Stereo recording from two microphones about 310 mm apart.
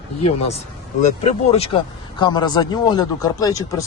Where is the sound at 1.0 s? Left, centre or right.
Left.